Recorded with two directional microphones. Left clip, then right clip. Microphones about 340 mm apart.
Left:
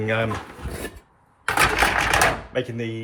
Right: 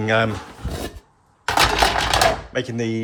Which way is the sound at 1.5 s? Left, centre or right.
Right.